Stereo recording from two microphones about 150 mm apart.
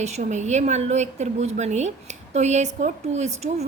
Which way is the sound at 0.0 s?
50° right (ahead or behind).